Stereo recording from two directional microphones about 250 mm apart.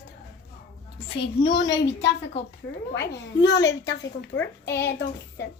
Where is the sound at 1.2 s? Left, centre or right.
Left.